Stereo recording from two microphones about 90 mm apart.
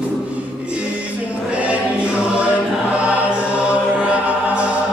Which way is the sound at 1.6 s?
15° right (ahead or behind).